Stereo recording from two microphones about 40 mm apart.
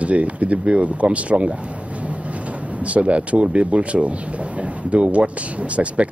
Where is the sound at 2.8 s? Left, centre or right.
Right.